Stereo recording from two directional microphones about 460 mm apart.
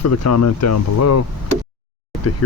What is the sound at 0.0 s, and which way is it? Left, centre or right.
Speech, left.